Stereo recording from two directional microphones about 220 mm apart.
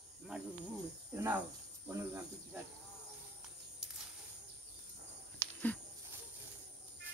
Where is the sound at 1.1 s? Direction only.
10° right (ahead or behind).